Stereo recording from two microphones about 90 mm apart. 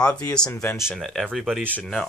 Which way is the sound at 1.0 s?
Centre (ahead or behind).